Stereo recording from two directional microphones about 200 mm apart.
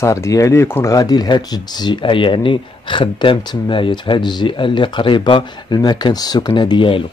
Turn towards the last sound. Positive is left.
turn(degrees=25)  # may be behind; listen again after turning